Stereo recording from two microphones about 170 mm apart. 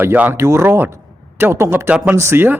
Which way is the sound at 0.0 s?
10° right (ahead or behind).